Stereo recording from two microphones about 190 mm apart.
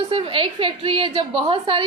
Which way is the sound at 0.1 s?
30° right (ahead or behind).